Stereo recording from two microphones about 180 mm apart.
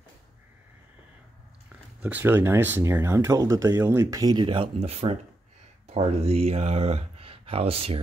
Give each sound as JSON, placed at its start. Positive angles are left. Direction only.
{"t": 2.0, "sound": "speech", "side_deg": -10}